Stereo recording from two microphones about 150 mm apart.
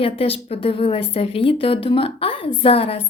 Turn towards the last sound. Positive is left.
turn(degrees=40)  # may be behind; listen again after turning